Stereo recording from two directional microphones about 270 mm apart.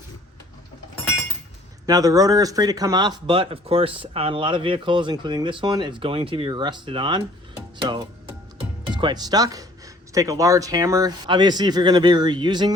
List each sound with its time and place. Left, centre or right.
1.9 s speech: centre